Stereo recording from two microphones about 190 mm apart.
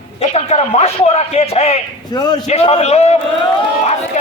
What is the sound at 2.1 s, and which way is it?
A man's voice, 20° left (ahead or behind).